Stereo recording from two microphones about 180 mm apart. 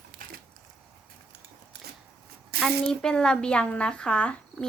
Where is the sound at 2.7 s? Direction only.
5° left (ahead or behind).